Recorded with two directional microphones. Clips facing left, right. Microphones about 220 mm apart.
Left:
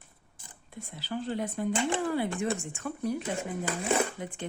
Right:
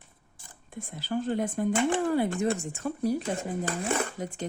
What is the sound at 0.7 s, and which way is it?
Speech, 50° right (ahead or behind).